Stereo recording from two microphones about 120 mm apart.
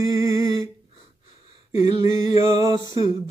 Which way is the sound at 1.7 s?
25° right (ahead or behind).